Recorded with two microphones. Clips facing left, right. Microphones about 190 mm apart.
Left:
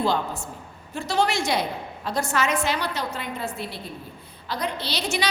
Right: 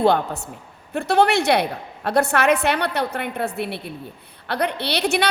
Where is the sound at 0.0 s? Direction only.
65° right (ahead or behind).